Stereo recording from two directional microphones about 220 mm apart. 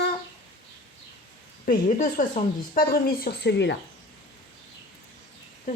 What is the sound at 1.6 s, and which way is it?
Speech, 35° left (ahead or behind).